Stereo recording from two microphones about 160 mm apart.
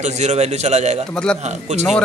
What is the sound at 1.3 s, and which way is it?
Speech, 45° right (ahead or behind).